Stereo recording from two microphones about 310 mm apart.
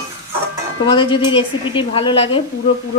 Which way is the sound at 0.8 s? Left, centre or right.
Centre.